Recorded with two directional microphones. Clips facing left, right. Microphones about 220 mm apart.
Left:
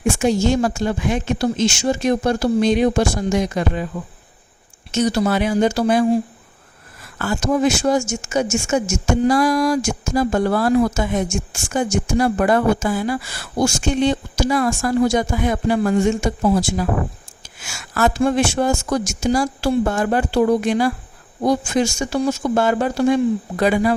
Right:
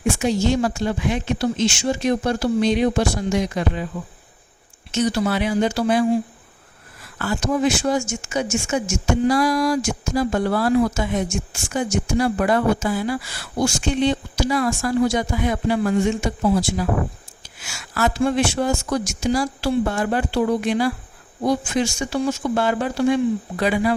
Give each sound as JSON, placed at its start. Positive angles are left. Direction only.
{"t": 0.2, "sound": "speech", "side_deg": 45}
{"t": 4.9, "sound": "speech", "side_deg": 45}
{"t": 7.2, "sound": "speech", "side_deg": 45}